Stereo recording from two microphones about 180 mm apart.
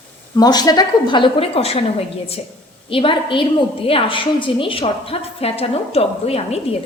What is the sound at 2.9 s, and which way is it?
A woman's voice, 30° left (ahead or behind).